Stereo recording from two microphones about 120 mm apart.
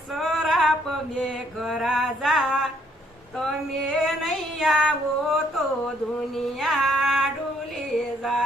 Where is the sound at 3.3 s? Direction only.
Centre (ahead or behind).